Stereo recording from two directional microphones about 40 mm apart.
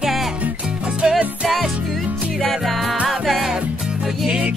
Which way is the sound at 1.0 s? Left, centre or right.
Centre.